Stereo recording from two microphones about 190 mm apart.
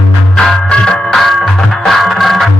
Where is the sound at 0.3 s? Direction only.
5° left (ahead or behind).